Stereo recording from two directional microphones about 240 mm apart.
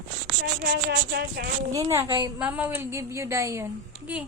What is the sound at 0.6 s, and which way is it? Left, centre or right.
Speech, right.